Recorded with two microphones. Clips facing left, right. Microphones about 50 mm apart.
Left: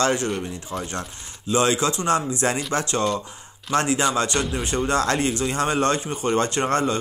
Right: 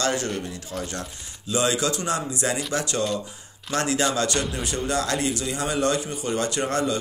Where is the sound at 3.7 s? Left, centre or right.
Left.